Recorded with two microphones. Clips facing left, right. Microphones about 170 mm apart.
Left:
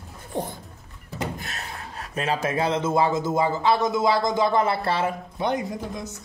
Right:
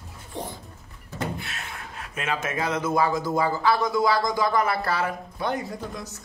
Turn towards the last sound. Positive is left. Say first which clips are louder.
# left 3 dB
turn(degrees=20)  # may be behind; listen again after turning